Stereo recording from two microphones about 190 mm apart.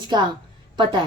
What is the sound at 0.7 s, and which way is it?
Speech, 25° right (ahead or behind).